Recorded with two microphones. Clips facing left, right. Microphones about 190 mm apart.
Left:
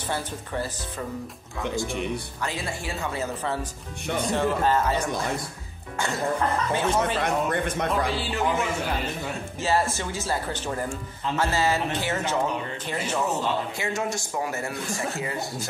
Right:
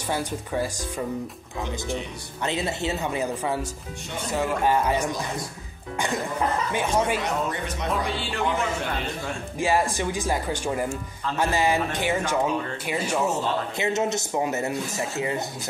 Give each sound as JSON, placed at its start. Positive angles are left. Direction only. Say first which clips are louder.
{"t": 0.1, "sound": "speech", "louder": "right 4 dB", "side_deg": -10}
{"t": 2.4, "sound": "a man's voice", "louder": "right 8 dB", "side_deg": -20}
{"t": 6.7, "sound": "speech", "louder": "even", "side_deg": -15}
{"t": 7.2, "sound": "speech", "louder": "left 2 dB", "side_deg": 55}
{"t": 8.0, "sound": "speech", "louder": "left 1 dB", "side_deg": 0}
{"t": 9.6, "sound": "speech", "louder": "right 2 dB", "side_deg": -15}
{"t": 13.7, "sound": "a man's voice", "louder": "right 4 dB", "side_deg": -20}